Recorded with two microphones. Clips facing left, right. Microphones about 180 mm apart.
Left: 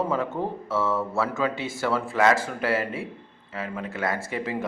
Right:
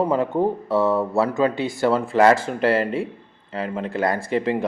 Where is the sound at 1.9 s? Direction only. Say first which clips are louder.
Right 5 dB; 30° right (ahead or behind).